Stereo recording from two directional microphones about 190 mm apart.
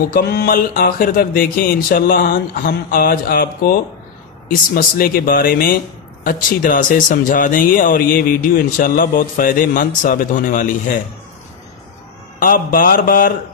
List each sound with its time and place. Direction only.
0.1 s speech: 55° left (ahead or behind)
12.4 s speech: 45° left (ahead or behind)